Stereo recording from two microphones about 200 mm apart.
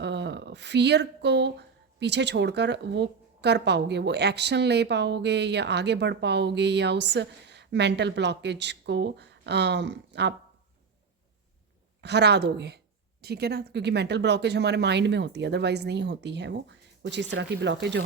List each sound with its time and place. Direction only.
0.0 s speech: 60° right (ahead or behind)
12.0 s speech: 55° right (ahead or behind)